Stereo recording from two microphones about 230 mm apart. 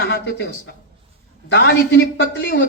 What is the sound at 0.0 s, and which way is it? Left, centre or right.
A man's voice, left.